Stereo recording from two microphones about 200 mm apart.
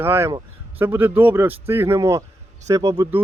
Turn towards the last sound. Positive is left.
turn(degrees=-15)  # may be behind; listen again after turning